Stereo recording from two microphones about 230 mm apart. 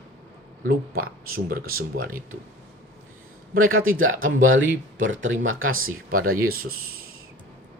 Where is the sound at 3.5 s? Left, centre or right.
Right.